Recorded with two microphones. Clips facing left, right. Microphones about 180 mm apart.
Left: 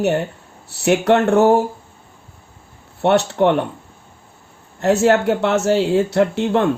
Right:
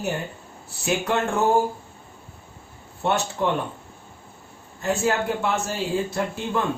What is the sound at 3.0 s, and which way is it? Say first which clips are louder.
Speech: left 9 dB; 70° left (ahead or behind).